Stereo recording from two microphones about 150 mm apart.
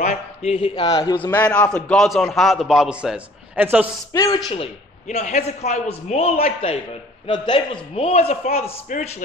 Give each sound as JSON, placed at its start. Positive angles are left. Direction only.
{"t": 0.0, "sound": "a man's voice", "side_deg": 50}
{"t": 0.7, "sound": "a man's voice", "side_deg": 25}
{"t": 1.1, "sound": "a man's voice", "side_deg": 10}
{"t": 4.1, "sound": "a man's voice", "side_deg": 20}
{"t": 5.0, "sound": "a man's voice", "side_deg": 50}
{"t": 7.2, "sound": "a man's voice", "side_deg": 30}